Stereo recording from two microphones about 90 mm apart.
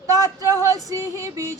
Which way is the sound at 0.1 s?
40° right (ahead or behind).